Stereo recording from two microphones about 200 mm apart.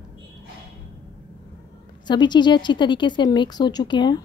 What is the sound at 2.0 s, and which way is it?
Speech, 20° left (ahead or behind).